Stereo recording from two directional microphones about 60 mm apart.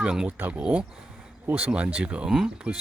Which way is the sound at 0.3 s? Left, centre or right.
Right.